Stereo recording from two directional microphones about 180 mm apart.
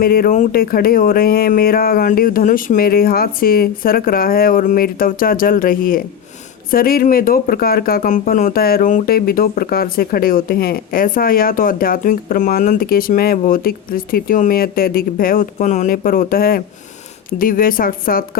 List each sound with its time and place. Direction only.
0.0 s speech: 55° left (ahead or behind)